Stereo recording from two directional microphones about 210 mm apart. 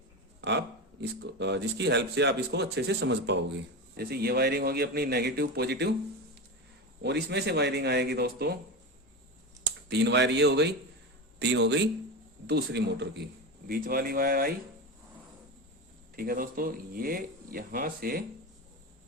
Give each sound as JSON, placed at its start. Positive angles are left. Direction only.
{"t": 1.3, "sound": "speech", "side_deg": -55}
{"t": 7.0, "sound": "speech", "side_deg": -55}
{"t": 9.9, "sound": "speech", "side_deg": -55}
{"t": 16.1, "sound": "speech", "side_deg": -45}